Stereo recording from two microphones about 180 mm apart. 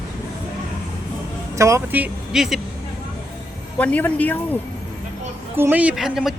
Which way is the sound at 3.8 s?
10° left (ahead or behind).